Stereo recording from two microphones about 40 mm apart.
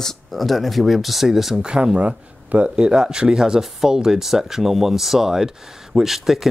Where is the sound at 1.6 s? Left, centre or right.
Centre.